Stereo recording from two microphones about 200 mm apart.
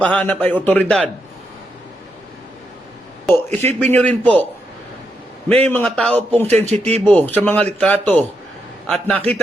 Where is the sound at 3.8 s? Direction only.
10° left (ahead or behind).